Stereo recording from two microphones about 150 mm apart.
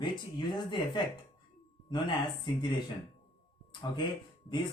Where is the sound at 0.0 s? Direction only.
30° left (ahead or behind).